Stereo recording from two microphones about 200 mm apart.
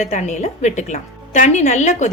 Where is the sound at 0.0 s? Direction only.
35° left (ahead or behind).